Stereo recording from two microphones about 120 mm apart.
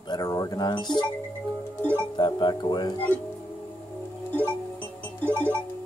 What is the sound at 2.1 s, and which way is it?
Speech, 35° left (ahead or behind).